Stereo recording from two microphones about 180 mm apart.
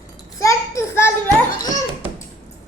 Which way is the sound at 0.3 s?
15° left (ahead or behind).